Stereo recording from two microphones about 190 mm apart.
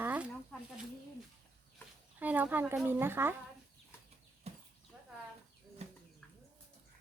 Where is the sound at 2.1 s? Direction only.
10° right (ahead or behind).